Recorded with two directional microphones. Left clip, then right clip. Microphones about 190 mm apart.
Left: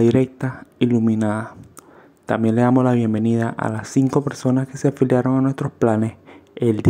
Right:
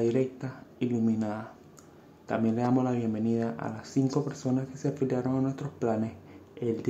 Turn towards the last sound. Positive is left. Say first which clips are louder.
# left 11 dB
turn(degrees=40)  # may be behind; listen again after turning